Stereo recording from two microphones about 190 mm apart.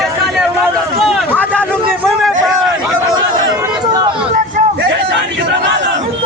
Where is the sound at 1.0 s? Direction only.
5° left (ahead or behind).